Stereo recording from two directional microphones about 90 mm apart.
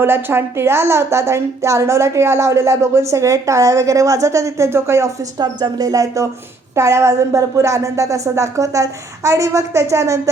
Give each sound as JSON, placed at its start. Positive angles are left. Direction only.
{"t": 0.0, "sound": "speech", "side_deg": -25}
{"t": 5.4, "sound": "speech", "side_deg": -50}